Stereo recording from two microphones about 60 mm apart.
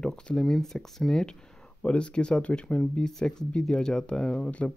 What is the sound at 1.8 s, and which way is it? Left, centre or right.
Speech, centre.